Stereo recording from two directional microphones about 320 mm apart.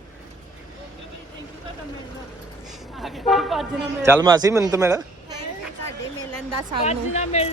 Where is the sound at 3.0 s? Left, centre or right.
Centre.